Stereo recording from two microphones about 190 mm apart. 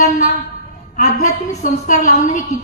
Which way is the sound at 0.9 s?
45° left (ahead or behind).